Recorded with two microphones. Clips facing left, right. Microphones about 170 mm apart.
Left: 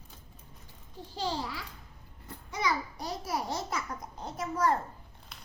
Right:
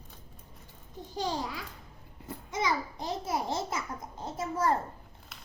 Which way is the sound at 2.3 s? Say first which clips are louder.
Right 1 dB; 20° right (ahead or behind).